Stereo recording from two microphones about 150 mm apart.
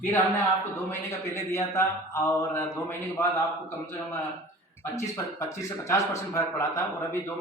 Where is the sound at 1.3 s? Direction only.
20° left (ahead or behind).